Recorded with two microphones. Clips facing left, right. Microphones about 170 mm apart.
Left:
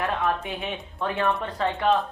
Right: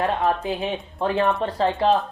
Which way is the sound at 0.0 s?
30° right (ahead or behind).